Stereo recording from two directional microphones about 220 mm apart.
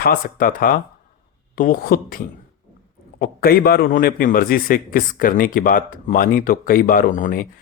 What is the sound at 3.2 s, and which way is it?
A man's voice, 45° left (ahead or behind).